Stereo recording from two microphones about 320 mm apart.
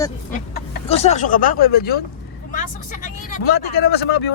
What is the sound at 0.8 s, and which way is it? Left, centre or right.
Speech, centre.